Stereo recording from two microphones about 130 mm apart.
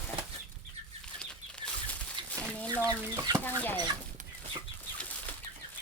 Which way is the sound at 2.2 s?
35° right (ahead or behind).